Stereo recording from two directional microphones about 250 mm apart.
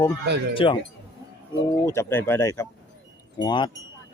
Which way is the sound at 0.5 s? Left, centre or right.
Left.